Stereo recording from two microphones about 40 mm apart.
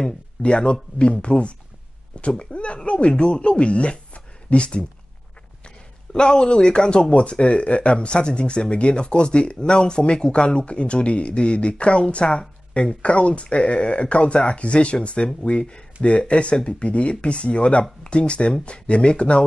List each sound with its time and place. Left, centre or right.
0.4 s speech: left
6.1 s speech: centre